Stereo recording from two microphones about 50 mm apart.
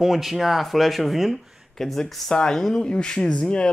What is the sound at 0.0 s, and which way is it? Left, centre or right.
Speech, centre.